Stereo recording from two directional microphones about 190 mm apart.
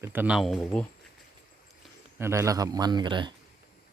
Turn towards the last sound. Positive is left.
turn(degrees=-25)  # may be behind; listen again after turning